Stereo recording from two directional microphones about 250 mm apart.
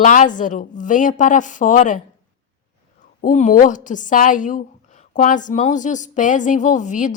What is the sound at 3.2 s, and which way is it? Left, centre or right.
A woman's voice, left.